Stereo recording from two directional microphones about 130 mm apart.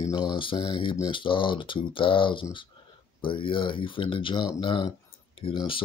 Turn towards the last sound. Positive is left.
turn(degrees=40)  # may be behind; listen again after turning